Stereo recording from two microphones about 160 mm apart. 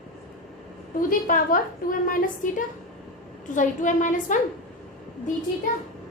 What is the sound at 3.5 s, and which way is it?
Speech, 55° left (ahead or behind).